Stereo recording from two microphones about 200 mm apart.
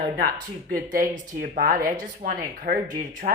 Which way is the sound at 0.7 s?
45° right (ahead or behind).